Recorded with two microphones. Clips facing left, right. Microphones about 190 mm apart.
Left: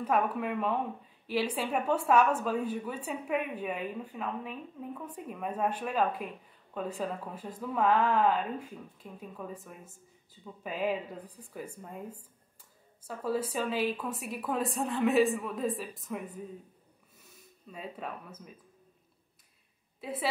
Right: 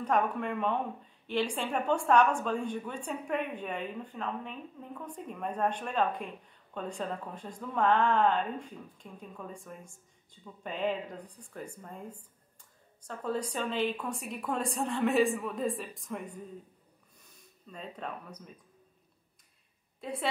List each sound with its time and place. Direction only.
0.0 s speech: 5° left (ahead or behind)
20.0 s a woman's voice: 5° left (ahead or behind)